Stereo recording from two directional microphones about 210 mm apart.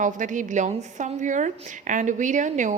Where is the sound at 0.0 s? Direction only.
35° right (ahead or behind).